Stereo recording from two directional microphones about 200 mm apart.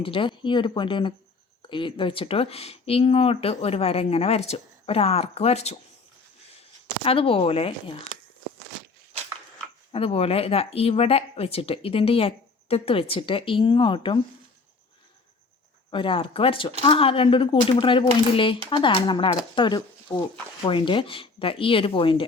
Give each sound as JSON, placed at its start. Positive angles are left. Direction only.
{"t": 0.0, "sound": "speech", "side_deg": 25}
{"t": 7.0, "sound": "speech", "side_deg": 30}
{"t": 9.9, "sound": "speech", "side_deg": 30}
{"t": 15.9, "sound": "speech", "side_deg": 25}